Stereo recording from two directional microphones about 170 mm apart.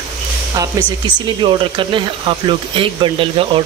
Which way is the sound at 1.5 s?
30° right (ahead or behind).